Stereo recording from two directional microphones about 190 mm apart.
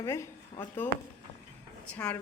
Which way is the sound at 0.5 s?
25° left (ahead or behind).